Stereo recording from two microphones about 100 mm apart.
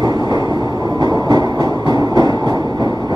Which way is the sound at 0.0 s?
45° right (ahead or behind).